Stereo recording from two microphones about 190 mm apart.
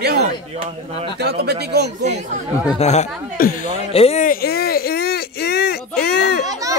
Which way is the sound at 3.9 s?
30° left (ahead or behind).